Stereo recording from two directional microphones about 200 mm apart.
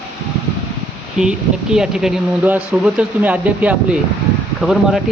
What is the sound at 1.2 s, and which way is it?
Speech, 5° right (ahead or behind).